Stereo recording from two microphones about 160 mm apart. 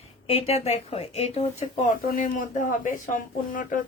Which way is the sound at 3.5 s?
60° left (ahead or behind).